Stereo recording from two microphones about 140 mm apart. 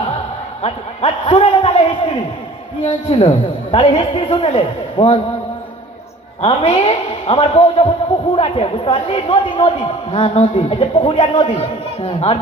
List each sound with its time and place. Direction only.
0.6 s a man's voice: 45° left (ahead or behind)
2.8 s a man's voice: 50° left (ahead or behind)
6.4 s a man's voice: 45° left (ahead or behind)
11.0 s a man's voice: 35° left (ahead or behind)